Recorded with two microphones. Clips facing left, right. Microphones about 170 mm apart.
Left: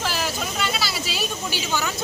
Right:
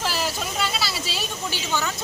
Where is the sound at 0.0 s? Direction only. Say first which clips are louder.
Even; 5° right (ahead or behind).